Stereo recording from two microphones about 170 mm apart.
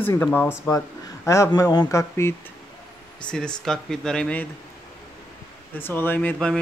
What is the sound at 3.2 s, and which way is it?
Speech, 5° left (ahead or behind).